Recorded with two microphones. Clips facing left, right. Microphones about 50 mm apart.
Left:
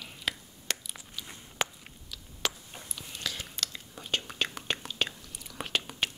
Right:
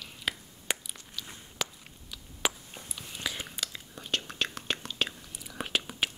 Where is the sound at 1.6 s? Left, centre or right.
Left.